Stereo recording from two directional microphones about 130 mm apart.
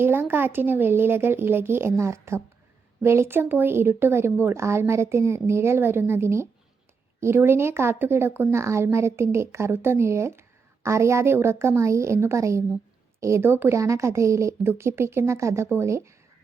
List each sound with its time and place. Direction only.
0.0 s speech: 15° right (ahead or behind)